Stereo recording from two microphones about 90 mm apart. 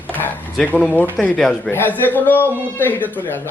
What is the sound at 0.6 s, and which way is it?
Speech, 15° left (ahead or behind).